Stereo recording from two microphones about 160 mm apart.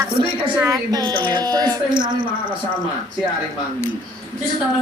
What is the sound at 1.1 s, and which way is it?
Speech, 10° left (ahead or behind).